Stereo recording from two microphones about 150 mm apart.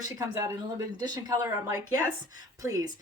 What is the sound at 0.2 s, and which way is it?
Speech, 25° right (ahead or behind).